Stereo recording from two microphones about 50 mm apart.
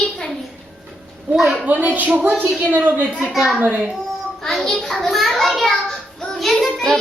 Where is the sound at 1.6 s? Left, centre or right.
Right.